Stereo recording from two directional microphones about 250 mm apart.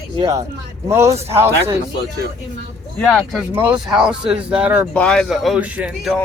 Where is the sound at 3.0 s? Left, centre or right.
Centre.